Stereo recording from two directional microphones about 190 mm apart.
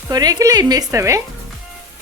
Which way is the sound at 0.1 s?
20° right (ahead or behind).